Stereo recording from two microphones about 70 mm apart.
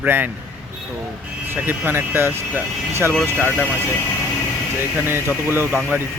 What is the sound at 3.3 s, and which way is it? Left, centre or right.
Speech, centre.